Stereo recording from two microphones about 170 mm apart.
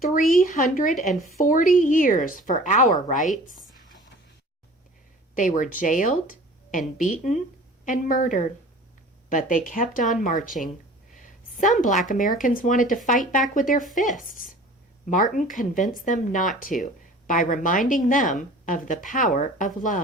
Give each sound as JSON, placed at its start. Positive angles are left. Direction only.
{"t": 0.1, "sound": "speech", "side_deg": 55}
{"t": 5.3, "sound": "speech", "side_deg": 50}
{"t": 11.1, "sound": "a sound", "side_deg": 50}
{"t": 11.8, "sound": "speech", "side_deg": 50}